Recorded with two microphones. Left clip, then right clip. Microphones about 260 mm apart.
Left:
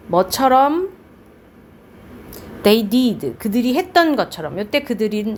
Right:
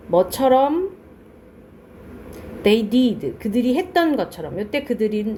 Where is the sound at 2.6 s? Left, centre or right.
Left.